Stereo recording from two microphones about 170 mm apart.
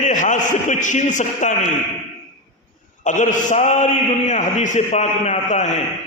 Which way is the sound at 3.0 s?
50° left (ahead or behind).